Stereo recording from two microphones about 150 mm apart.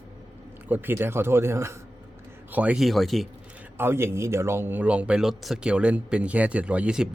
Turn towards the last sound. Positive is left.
turn(degrees=-5)  # may be behind; listen again after turning